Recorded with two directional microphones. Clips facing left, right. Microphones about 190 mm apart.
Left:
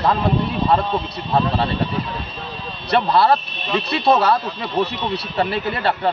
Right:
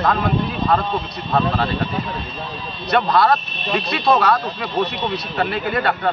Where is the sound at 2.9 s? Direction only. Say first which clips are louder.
Even; 30° left (ahead or behind).